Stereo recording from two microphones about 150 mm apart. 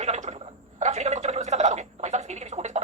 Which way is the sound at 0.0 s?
50° right (ahead or behind).